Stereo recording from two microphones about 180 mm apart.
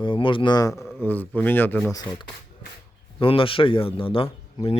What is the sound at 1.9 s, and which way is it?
A man's voice, 25° left (ahead or behind).